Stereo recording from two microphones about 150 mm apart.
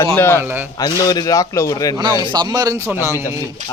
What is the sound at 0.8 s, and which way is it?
Speech, 25° left (ahead or behind).